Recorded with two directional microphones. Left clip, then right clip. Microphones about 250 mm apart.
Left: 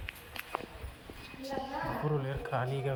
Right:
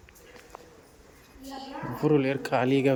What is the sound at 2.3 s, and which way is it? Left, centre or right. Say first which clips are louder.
Speech: right 8 dB; right.